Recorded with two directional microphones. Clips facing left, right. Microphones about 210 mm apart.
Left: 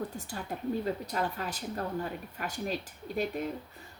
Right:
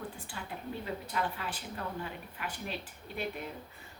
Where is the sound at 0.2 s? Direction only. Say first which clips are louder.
Left 5 dB; 40° left (ahead or behind).